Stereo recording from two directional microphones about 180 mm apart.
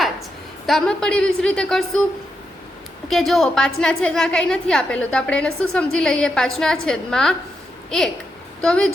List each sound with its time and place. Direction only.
0.7 s a woman's voice: 5° left (ahead or behind)
3.1 s a woman's voice: centre (ahead or behind)